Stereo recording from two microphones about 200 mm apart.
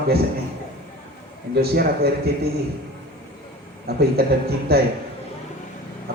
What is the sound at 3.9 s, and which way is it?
Speech, 50° right (ahead or behind).